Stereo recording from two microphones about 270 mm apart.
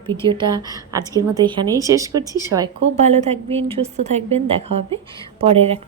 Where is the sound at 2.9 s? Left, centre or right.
Right.